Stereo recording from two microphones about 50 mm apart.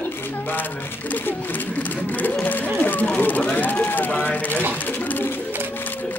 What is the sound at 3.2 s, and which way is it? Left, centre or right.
Speech, left.